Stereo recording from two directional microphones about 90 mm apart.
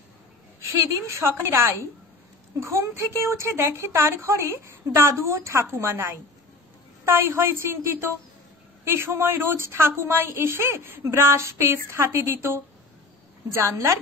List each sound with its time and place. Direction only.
0.8 s a woman's voice: 35° right (ahead or behind)